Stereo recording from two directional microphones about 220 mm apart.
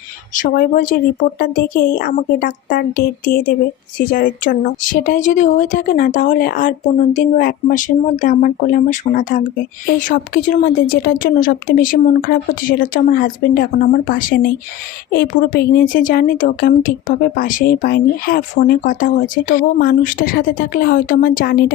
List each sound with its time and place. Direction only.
0.3 s a woman's voice: 40° left (ahead or behind)